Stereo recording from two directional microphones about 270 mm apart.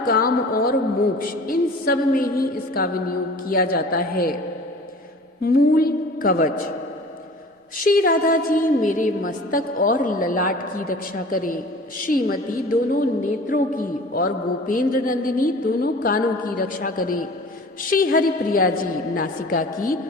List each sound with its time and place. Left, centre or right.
0.0 s a woman's voice: left
5.4 s a woman's voice: left
7.9 s a woman's voice: left
13.5 s a woman's voice: left